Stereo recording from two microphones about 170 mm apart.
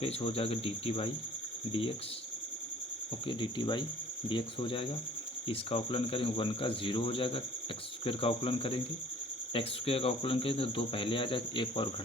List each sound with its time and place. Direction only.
0.0 s speech: 35° left (ahead or behind)
3.2 s speech: 30° left (ahead or behind)